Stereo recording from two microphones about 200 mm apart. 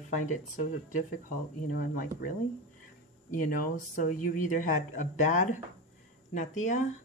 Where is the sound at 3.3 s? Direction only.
40° left (ahead or behind).